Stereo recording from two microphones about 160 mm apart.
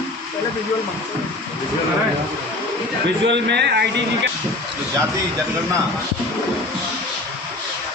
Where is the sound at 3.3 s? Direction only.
90° right.